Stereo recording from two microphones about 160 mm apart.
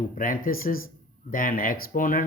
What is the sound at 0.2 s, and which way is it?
Speech, 60° left (ahead or behind).